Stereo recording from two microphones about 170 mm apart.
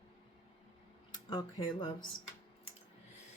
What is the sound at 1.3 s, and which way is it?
Speech, 25° left (ahead or behind).